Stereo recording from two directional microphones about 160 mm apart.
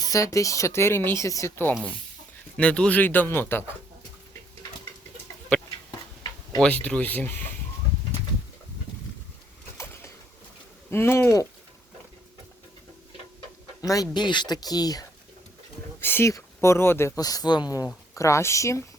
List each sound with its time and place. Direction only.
0.0 s speech: 20° left (ahead or behind)
6.6 s speech: 10° left (ahead or behind)
9.7 s a sound: 15° left (ahead or behind)
10.9 s speech: 15° left (ahead or behind)
13.8 s speech: 20° left (ahead or behind)
16.0 s speech: 15° left (ahead or behind)